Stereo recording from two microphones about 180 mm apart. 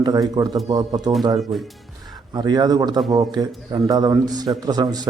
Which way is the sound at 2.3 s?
25° right (ahead or behind).